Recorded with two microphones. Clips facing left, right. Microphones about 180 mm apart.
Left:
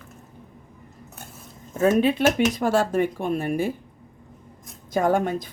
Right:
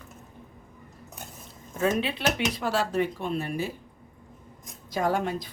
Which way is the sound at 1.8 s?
45° left (ahead or behind).